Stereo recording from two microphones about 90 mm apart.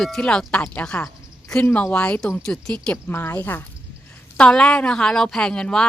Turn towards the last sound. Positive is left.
turn(degrees=10)  # may be behind; listen again after turning